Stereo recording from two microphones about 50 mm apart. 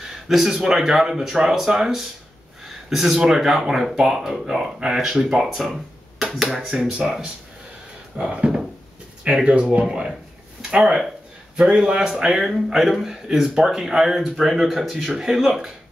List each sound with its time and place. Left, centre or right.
0.3 s a man's voice: centre
6.9 s a man's voice: centre